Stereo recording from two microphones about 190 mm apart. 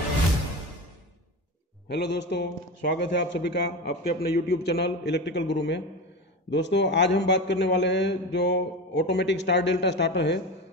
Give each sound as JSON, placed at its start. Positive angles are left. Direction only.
{"t": 1.9, "sound": "a man's voice", "side_deg": 65}